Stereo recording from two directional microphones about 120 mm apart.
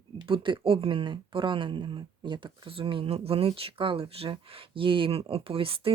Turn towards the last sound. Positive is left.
turn(degrees=-50)  # may be behind; listen again after turning